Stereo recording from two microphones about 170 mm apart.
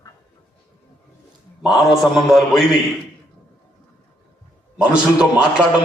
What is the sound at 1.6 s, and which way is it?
A man's voice, centre (ahead or behind).